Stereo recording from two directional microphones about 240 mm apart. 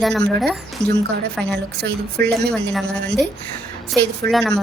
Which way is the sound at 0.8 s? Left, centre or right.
Centre.